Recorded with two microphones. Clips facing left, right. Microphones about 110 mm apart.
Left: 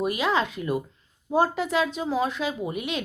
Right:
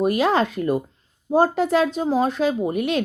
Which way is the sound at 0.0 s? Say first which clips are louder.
Right 6 dB; 45° right (ahead or behind).